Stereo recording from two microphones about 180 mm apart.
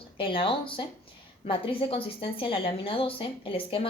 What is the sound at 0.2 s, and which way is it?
A woman's voice, 30° left (ahead or behind).